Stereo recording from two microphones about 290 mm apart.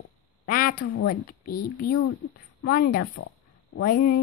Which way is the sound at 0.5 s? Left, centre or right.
Left.